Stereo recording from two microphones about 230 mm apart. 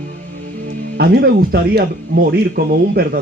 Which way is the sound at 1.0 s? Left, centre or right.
Right.